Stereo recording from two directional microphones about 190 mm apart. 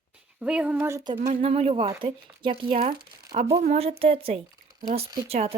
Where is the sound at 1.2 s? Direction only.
35° right (ahead or behind).